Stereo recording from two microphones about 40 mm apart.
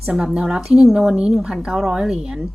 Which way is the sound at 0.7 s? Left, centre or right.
Right.